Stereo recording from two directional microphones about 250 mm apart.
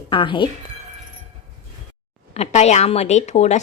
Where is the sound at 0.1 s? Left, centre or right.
Centre.